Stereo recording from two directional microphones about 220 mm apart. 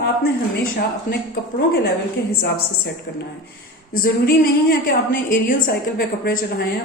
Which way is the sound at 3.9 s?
40° left (ahead or behind).